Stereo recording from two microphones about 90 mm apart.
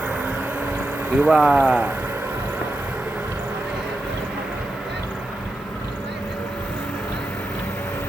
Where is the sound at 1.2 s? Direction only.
10° right (ahead or behind).